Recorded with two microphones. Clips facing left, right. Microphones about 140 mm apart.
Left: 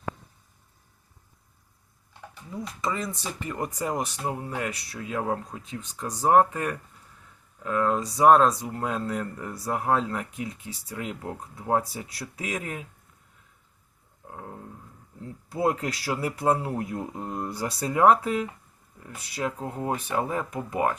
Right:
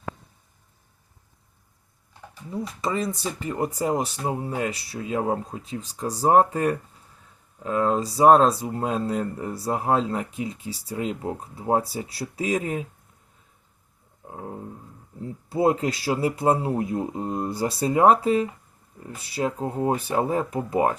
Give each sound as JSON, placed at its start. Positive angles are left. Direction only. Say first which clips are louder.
{"t": 2.5, "sound": "speech", "louder": "right 3 dB", "side_deg": -30}
{"t": 14.3, "sound": "a sound", "louder": "right 5 dB", "side_deg": -20}
{"t": 15.2, "sound": "speech", "louder": "right 4 dB", "side_deg": -25}